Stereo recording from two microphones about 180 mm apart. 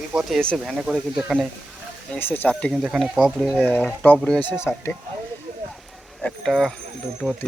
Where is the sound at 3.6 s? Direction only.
10° left (ahead or behind).